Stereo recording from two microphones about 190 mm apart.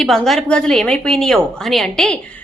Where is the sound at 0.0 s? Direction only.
Centre (ahead or behind).